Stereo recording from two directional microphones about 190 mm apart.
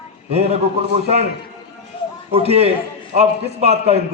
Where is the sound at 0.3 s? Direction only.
35° right (ahead or behind).